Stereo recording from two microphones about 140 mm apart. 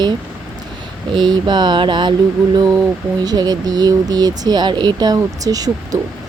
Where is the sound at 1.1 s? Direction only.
30° right (ahead or behind).